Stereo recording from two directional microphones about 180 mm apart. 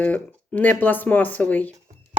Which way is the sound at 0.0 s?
10° left (ahead or behind).